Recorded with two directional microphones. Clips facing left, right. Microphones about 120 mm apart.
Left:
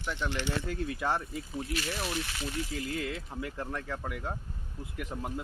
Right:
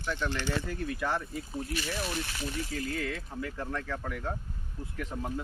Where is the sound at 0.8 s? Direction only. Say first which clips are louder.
Even; 20° left (ahead or behind).